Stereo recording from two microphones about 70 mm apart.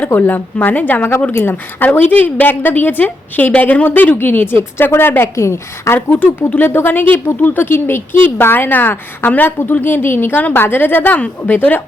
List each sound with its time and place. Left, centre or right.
0.1 s speech: left
1.8 s speech: left
6.1 s speech: left